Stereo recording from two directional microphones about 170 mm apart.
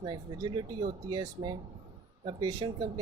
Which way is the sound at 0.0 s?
25° right (ahead or behind).